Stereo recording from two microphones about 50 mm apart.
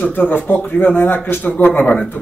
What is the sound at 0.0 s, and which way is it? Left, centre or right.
Speech, left.